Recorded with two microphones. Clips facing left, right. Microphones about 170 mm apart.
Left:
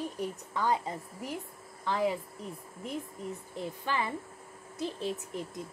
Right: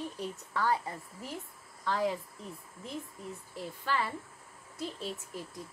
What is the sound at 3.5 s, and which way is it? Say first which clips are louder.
A woman's voice: even; 20° left (ahead or behind).